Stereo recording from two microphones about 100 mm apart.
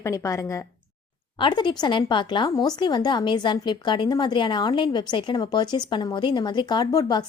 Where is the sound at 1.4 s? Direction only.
50° left (ahead or behind).